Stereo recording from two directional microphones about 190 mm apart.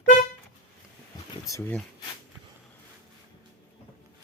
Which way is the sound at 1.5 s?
10° left (ahead or behind).